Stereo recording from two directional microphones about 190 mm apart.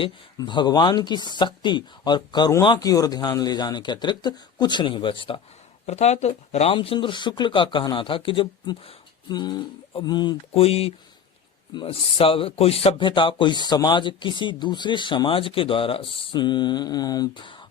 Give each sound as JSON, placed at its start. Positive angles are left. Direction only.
{"t": 0.0, "sound": "a man's voice", "side_deg": 25}